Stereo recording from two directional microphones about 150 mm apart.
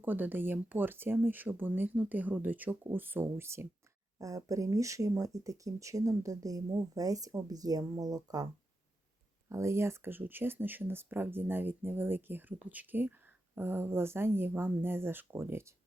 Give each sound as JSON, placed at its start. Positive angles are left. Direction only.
{"t": 0.0, "sound": "speech", "side_deg": -10}
{"t": 9.5, "sound": "speech", "side_deg": -20}